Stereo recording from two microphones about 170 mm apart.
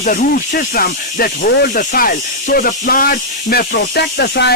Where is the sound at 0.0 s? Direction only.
55° left (ahead or behind).